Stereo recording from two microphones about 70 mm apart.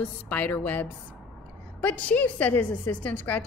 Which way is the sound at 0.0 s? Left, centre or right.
Left.